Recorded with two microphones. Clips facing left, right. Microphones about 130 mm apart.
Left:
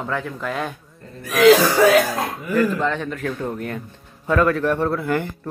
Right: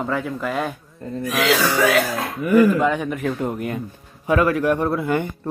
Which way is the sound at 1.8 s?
35° left (ahead or behind).